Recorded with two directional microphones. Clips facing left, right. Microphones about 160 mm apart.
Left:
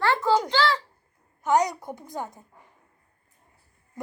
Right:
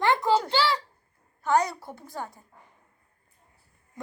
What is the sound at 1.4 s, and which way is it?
A woman's voice, 20° left (ahead or behind).